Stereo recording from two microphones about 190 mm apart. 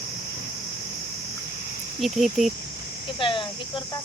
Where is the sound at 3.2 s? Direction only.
25° left (ahead or behind).